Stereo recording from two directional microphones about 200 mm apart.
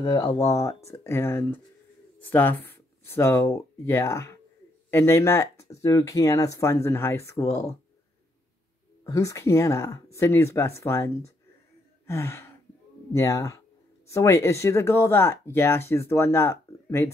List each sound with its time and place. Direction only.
0.0 s speech: 20° left (ahead or behind)
9.0 s speech: 15° left (ahead or behind)